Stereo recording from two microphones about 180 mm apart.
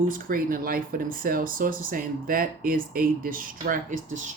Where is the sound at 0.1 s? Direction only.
50° right (ahead or behind).